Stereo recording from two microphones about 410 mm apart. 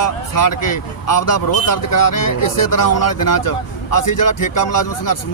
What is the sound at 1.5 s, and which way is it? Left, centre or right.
Speech, left.